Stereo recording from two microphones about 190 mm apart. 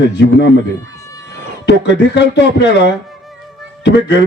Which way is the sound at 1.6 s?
65° left (ahead or behind).